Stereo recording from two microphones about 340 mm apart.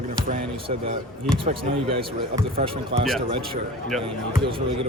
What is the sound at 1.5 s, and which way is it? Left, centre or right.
Speech, centre.